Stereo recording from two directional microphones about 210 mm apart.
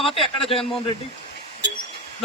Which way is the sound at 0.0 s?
25° left (ahead or behind).